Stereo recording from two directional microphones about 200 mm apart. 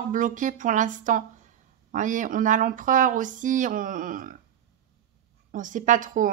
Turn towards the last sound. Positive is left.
turn(degrees=-40)  # may be behind; listen again after turning